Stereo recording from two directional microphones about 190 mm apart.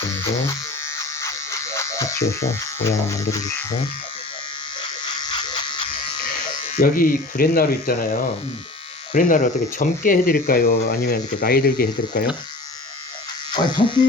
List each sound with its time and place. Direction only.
0.9 s electric shaver: 15° left (ahead or behind)
6.7 s speech: 50° left (ahead or behind)
13.5 s speech: 25° left (ahead or behind)